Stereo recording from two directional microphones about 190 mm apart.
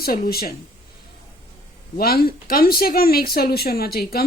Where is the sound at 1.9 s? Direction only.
55° left (ahead or behind).